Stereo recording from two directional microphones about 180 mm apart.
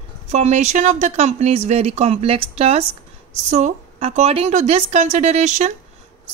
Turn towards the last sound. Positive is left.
turn(degrees=-40)  # may be behind; listen again after turning